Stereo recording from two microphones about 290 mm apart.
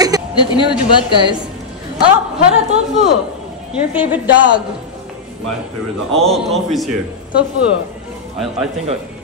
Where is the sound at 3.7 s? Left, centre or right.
Centre.